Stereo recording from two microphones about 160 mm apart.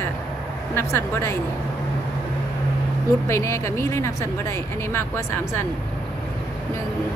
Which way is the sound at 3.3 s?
15° left (ahead or behind).